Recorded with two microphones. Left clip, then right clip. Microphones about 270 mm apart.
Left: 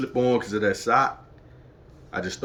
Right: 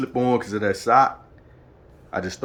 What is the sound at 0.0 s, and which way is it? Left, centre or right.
A man's voice, centre.